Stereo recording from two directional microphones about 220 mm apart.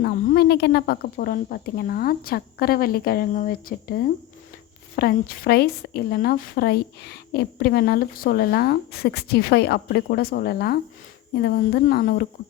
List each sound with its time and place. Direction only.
0.0 s speech: 45° left (ahead or behind)